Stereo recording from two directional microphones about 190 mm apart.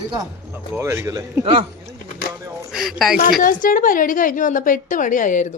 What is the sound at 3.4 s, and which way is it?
A woman's voice, 45° left (ahead or behind).